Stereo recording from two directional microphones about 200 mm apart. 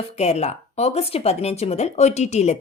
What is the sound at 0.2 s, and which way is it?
A woman's voice, 30° left (ahead or behind).